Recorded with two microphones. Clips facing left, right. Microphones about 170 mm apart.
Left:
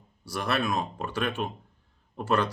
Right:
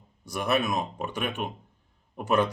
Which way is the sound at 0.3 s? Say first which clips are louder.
Right 2 dB; 15° right (ahead or behind).